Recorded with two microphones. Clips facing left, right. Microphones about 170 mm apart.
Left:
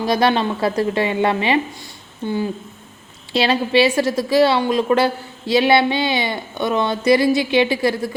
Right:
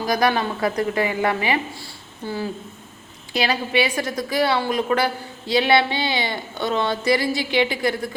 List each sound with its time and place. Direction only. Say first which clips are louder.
0.0 s a woman's voice: left 3 dB; 25° left (ahead or behind)